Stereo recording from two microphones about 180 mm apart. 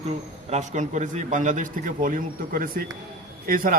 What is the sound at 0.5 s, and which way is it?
A man's voice, 40° right (ahead or behind).